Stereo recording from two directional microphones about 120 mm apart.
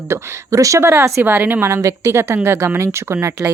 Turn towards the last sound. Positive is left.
turn(degrees=-20)  # may be behind; listen again after turning